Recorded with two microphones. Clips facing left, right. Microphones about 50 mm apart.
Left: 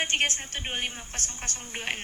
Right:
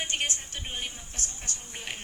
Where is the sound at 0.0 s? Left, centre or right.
Left.